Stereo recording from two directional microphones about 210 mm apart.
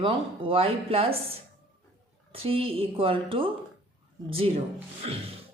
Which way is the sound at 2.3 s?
25° right (ahead or behind).